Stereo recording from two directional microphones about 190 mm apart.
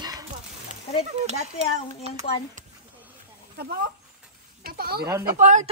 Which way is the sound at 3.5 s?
55° right (ahead or behind).